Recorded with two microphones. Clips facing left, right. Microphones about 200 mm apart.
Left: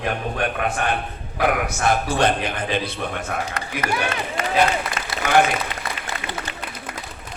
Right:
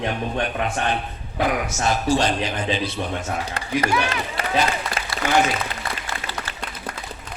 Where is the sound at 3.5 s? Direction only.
30° right (ahead or behind).